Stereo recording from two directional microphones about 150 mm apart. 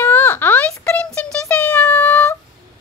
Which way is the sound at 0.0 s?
15° left (ahead or behind).